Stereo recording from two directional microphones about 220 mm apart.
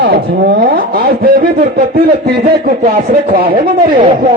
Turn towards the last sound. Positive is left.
turn(degrees=-45)  # may be behind; listen again after turning